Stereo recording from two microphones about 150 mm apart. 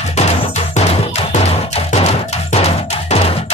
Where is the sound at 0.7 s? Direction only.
50° left (ahead or behind).